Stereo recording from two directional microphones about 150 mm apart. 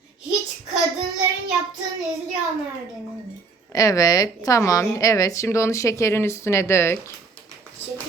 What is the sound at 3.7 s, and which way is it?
A woman's voice, 25° left (ahead or behind).